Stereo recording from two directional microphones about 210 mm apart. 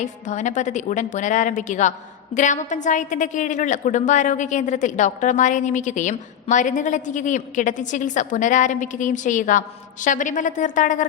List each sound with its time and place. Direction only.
0.0 s a woman's voice: 35° left (ahead or behind)